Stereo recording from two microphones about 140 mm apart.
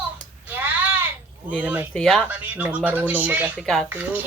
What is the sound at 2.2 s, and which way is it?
Speech, 10° right (ahead or behind).